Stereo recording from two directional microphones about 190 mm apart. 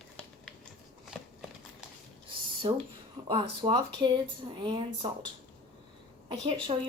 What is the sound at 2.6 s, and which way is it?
Speech, 30° right (ahead or behind).